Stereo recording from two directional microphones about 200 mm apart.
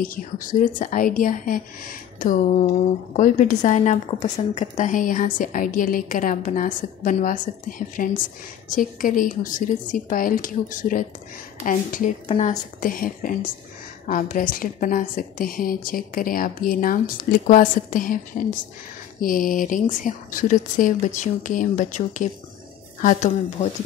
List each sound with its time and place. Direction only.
0.0 s a woman's voice: 45° left (ahead or behind)
19.2 s a woman's voice: 45° left (ahead or behind)